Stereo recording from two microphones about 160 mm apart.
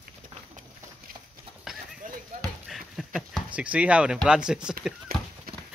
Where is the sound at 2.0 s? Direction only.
55° right (ahead or behind).